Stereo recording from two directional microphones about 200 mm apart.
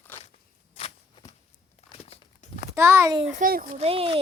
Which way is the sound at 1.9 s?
30° left (ahead or behind).